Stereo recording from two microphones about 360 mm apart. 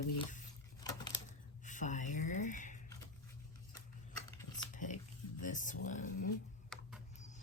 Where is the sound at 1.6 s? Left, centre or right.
Centre.